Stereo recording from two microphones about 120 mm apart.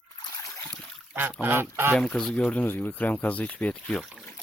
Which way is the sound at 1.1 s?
15° right (ahead or behind).